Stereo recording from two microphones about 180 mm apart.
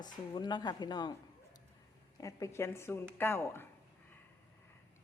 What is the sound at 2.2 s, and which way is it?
Speech, 15° left (ahead or behind).